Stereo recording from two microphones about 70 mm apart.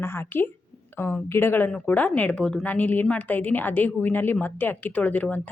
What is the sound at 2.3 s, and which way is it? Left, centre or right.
Speech, centre.